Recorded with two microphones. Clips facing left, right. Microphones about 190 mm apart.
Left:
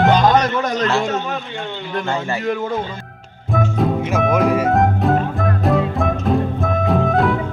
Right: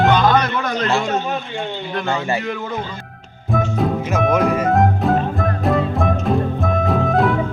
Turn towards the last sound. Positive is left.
turn(degrees=0)  # may be behind; listen again after turning